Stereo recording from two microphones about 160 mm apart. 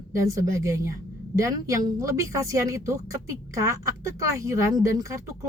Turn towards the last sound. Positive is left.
turn(degrees=-20)  # may be behind; listen again after turning